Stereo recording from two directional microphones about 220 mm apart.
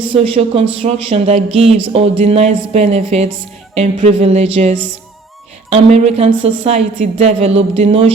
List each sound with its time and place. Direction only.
0.2 s speech: 25° right (ahead or behind)